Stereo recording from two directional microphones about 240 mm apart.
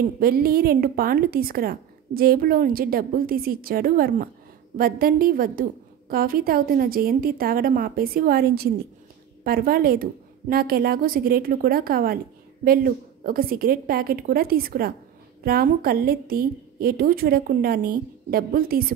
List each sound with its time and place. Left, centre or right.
0.2 s a woman's voice: right